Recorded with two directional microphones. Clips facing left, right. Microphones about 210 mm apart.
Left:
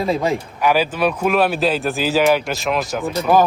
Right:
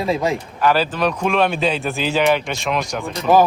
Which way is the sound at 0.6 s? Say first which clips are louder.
Even; 10° left (ahead or behind).